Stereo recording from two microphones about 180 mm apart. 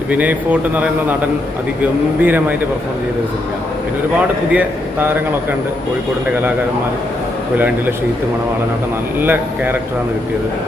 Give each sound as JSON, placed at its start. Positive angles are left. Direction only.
{"t": 0.1, "sound": "a man's voice", "side_deg": -10}
{"t": 1.8, "sound": "a man's voice", "side_deg": -10}
{"t": 4.5, "sound": "a man's voice", "side_deg": -10}
{"t": 9.2, "sound": "a man's voice", "side_deg": -10}